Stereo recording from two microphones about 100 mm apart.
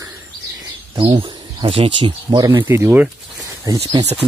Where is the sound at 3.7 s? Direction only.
40° right (ahead or behind).